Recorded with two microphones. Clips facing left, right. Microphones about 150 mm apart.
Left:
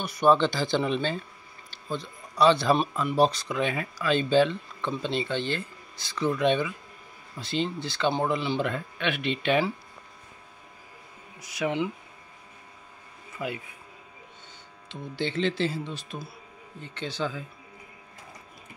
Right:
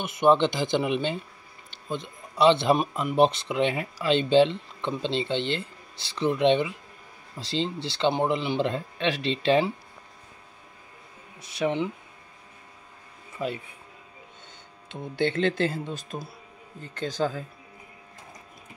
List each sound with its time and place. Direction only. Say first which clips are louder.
0.0 s speech: right 1 dB; 20° right (ahead or behind)
11.3 s speech: right 3 dB; 25° right (ahead or behind)
14.9 s speech: right 5 dB; 55° right (ahead or behind)